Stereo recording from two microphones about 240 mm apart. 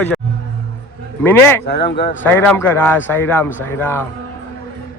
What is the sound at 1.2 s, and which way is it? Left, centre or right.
Speech, centre.